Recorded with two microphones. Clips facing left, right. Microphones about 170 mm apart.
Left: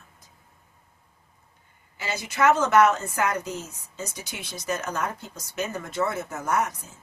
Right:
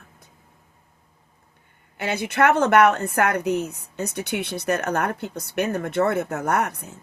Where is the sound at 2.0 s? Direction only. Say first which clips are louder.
Right 5 dB; 60° right (ahead or behind).